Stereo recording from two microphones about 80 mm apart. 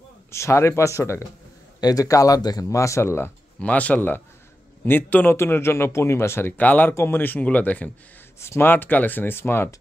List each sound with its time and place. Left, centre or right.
0.3 s a man's voice: left
1.8 s speech: left
3.5 s a man's voice: centre
6.5 s speech: centre
8.4 s speech: left